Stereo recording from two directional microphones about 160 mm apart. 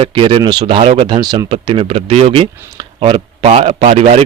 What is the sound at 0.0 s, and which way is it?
Speech, 30° right (ahead or behind).